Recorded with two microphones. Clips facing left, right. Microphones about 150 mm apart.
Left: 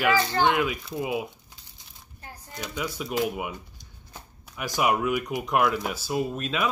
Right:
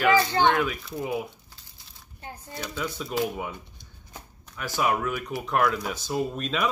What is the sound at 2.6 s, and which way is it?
Speech, 10° left (ahead or behind).